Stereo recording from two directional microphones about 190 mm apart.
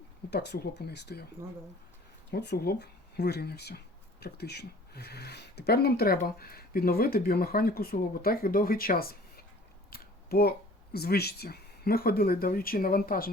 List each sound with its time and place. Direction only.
0.3 s speech: 60° left (ahead or behind)
2.3 s speech: 60° left (ahead or behind)
9.9 s a sound: 55° left (ahead or behind)
10.9 s speech: 55° left (ahead or behind)